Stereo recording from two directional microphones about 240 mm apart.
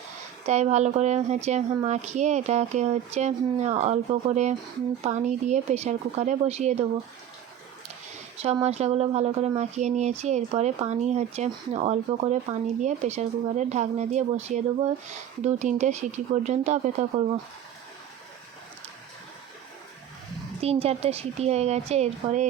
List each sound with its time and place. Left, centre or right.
0.4 s speech: right
8.4 s speech: right
20.6 s speech: right